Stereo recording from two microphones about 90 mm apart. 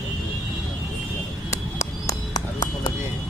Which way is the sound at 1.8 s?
35° left (ahead or behind).